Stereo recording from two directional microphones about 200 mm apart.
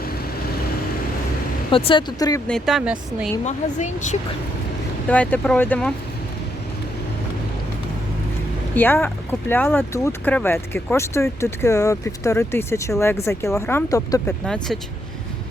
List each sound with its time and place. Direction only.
1.7 s speech: 25° left (ahead or behind)
2.5 s speech: centre (ahead or behind)
3.4 s speech: 35° left (ahead or behind)
5.0 s speech: 10° left (ahead or behind)
8.7 s speech: 10° left (ahead or behind)
14.4 s speech: 5° left (ahead or behind)